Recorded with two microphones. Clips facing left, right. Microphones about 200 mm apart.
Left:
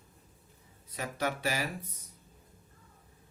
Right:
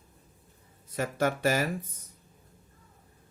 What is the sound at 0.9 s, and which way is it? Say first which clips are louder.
Speech: right 6 dB; 45° right (ahead or behind).